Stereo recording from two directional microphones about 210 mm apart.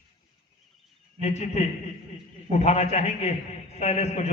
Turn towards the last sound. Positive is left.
turn(degrees=30)  # may be behind; listen again after turning